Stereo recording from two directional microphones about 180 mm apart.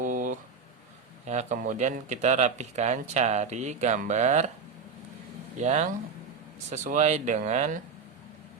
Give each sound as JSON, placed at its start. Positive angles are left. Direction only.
{"t": 0.0, "sound": "a sound", "side_deg": -45}
{"t": 1.3, "sound": "speech", "side_deg": -40}
{"t": 5.5, "sound": "speech", "side_deg": -40}